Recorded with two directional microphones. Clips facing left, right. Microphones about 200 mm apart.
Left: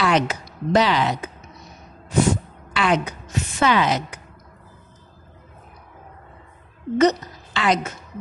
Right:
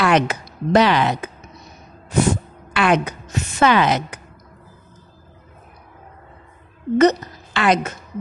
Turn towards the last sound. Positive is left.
turn(degrees=-60)  # may be behind; listen again after turning